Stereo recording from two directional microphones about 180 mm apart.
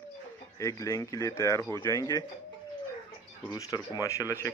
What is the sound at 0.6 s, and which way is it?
Speech, 15° left (ahead or behind).